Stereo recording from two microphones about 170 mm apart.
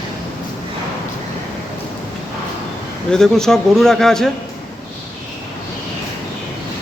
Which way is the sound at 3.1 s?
5° left (ahead or behind).